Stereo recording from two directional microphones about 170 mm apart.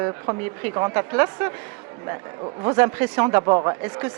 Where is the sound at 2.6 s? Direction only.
15° right (ahead or behind).